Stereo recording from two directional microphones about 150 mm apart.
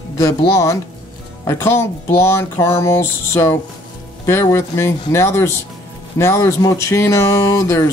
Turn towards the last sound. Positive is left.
turn(degrees=20)  # may be behind; listen again after turning